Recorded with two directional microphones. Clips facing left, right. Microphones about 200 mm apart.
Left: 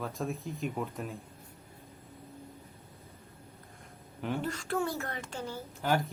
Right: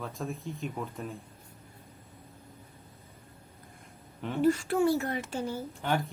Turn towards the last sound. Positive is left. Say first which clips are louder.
# left 1 dB
turn(degrees=5)  # may be behind; listen again after turning